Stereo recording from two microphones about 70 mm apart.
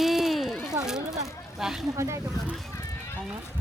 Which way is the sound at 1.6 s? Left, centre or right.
Centre.